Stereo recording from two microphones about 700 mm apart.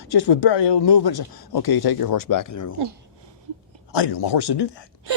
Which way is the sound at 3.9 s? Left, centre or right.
Left.